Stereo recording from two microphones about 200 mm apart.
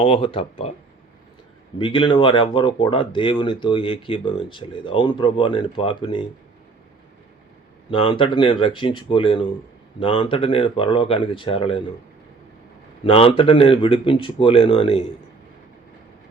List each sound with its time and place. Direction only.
0.0 s speech: 25° left (ahead or behind)
1.8 s speech: 25° left (ahead or behind)
7.9 s speech: 25° left (ahead or behind)
13.1 s speech: 25° left (ahead or behind)